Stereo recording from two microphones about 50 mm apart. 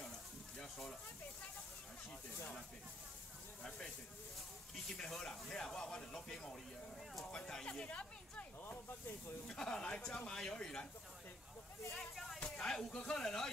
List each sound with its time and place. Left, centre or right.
3.6 s speech: centre
9.5 s speech: centre
11.9 s speech: centre
12.4 s a sound: centre
12.9 s speech: centre